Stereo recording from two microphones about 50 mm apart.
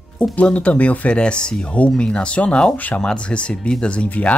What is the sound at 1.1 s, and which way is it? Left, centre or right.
Speech, centre.